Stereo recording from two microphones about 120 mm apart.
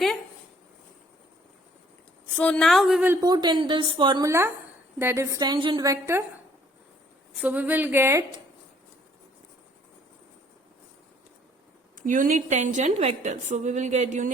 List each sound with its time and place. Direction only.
2.3 s a woman's voice: 10° left (ahead or behind)
3.2 s speech: 35° right (ahead or behind)
4.2 s a woman's voice: 25° right (ahead or behind)
5.4 s speech: 40° right (ahead or behind)
5.8 s a woman's voice: 25° right (ahead or behind)
7.4 s a woman's voice: 15° right (ahead or behind)
11.9 s a woman's voice: 90° right